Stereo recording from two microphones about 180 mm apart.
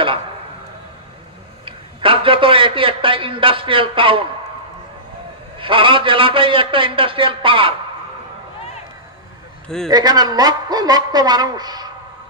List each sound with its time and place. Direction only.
1.7 s a man's voice: 30° right (ahead or behind)
5.6 s a man's voice: 30° right (ahead or behind)
9.8 s a man's voice: 20° right (ahead or behind)